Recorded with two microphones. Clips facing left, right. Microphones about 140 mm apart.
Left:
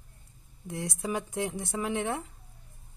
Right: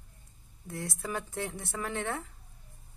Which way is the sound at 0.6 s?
20° left (ahead or behind).